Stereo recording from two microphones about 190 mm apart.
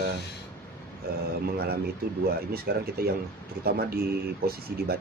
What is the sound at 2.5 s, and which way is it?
Speech, 55° right (ahead or behind).